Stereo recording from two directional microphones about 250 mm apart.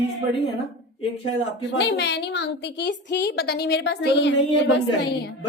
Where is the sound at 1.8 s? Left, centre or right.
Left.